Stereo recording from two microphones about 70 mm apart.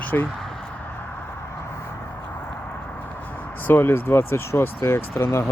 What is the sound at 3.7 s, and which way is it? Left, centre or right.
Speech, left.